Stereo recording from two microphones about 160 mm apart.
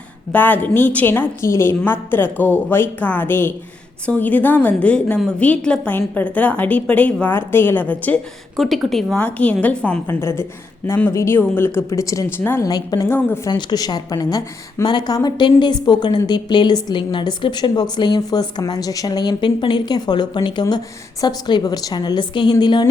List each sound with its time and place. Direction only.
0.3 s a woman's voice: 10° left (ahead or behind); by 22.9 s 30° left (ahead or behind)